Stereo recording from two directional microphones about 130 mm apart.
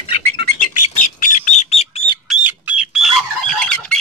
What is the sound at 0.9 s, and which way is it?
Bird, 85° left.